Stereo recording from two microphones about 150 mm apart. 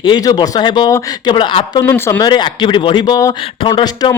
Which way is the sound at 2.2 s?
30° left (ahead or behind).